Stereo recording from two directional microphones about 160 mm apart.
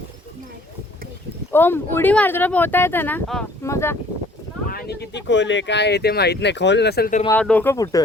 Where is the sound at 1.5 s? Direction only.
15° left (ahead or behind).